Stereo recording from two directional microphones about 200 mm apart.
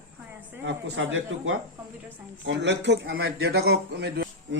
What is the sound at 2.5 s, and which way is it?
Speech, 60° right (ahead or behind).